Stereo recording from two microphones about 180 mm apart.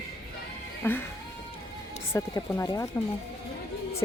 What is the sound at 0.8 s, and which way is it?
Speech, 10° left (ahead or behind).